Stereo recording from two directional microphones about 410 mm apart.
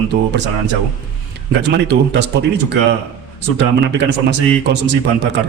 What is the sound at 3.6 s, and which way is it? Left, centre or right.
Speech, right.